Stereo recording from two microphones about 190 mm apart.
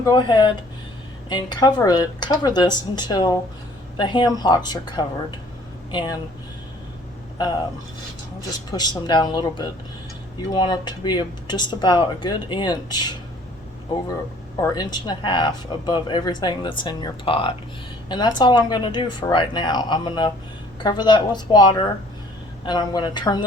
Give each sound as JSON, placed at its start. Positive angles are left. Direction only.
{"t": 0.0, "sound": "speech", "side_deg": 25}
{"t": 8.4, "sound": "speech", "side_deg": 20}
{"t": 14.6, "sound": "speech", "side_deg": 20}